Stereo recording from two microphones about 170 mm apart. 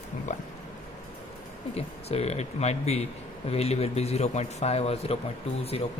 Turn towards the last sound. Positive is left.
turn(degrees=35)  # may be behind; listen again after turning